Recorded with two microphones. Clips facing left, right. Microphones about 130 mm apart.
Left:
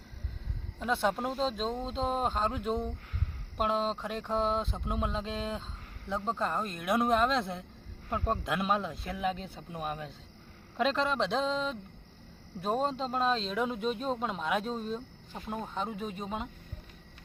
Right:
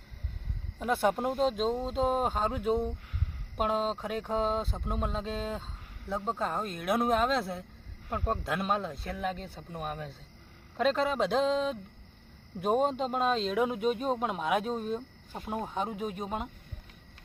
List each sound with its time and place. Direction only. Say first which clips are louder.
0.8 s speech: right 2 dB; 10° right (ahead or behind)